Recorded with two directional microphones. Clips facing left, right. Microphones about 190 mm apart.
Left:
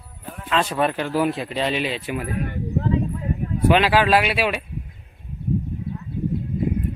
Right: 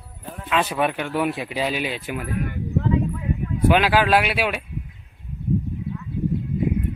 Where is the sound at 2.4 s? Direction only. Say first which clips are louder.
Even; 35° left (ahead or behind).